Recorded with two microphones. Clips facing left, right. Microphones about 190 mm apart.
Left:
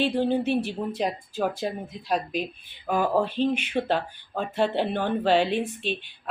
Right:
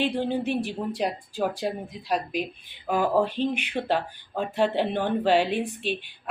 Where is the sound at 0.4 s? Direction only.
15° right (ahead or behind).